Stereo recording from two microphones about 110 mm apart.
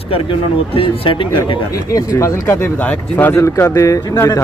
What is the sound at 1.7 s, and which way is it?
Speech, 30° left (ahead or behind).